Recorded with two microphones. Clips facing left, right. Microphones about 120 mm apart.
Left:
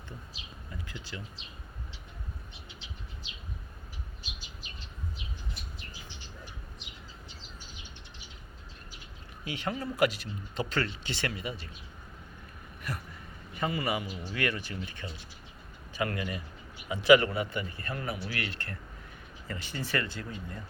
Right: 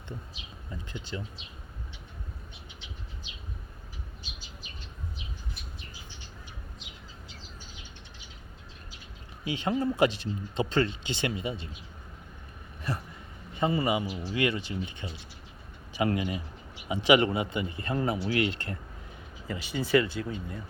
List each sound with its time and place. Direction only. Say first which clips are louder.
0.7 s speech: right 5 dB; 25° right (ahead or behind)
9.4 s speech: right 6 dB; 25° right (ahead or behind)
12.9 s a sound: right 5 dB; 25° right (ahead or behind)
13.5 s a man's voice: right 5 dB; 25° right (ahead or behind)